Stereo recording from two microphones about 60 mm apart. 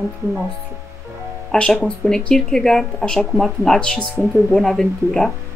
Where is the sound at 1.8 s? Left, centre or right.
Centre.